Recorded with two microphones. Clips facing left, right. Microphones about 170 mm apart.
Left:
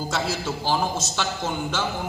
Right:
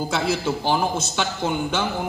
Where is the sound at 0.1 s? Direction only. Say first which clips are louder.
Right 3 dB; 55° right (ahead or behind).